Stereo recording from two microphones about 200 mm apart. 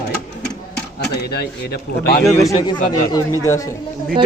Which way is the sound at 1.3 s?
55° left (ahead or behind).